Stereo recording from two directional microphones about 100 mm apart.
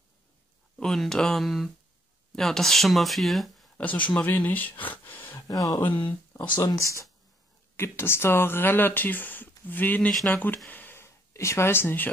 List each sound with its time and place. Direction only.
0.7 s speech: 5° left (ahead or behind)
3.7 s speech: 15° left (ahead or behind)
4.8 s a sound: 20° left (ahead or behind)
5.5 s speech: 35° left (ahead or behind)
5.9 s speech: 55° left (ahead or behind)
6.6 s speech: 30° left (ahead or behind)
10.7 s a sound: 20° left (ahead or behind)